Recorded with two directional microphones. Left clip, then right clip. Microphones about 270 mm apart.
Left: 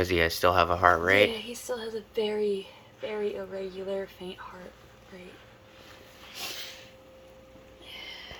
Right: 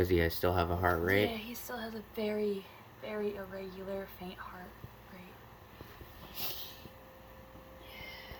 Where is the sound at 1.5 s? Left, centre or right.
Left.